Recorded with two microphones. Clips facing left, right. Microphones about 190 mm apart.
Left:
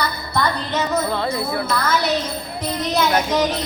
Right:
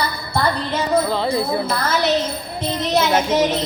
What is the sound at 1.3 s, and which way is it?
Jingle bell, 30° right (ahead or behind).